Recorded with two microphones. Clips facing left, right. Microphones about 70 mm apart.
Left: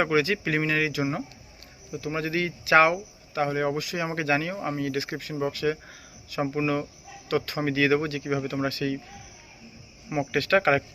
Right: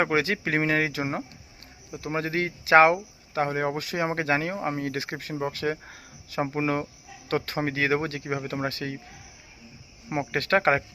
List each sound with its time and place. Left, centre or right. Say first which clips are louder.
0.0 s speech: left 1 dB; right
10.1 s speech: left 1 dB; right